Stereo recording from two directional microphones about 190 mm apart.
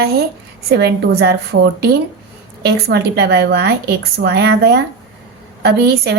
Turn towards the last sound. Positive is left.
turn(degrees=-60)  # may be behind; listen again after turning